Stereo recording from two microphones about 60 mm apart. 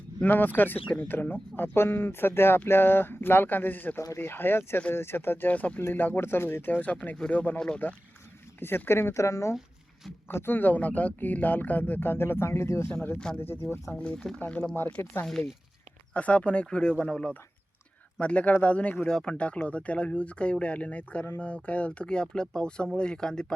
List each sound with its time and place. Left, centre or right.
0.2 s speech: left
6.7 s speech: left
10.2 s speech: left
13.3 s speech: left
13.9 s speech: centre
15.0 s speech: left
16.1 s speech: left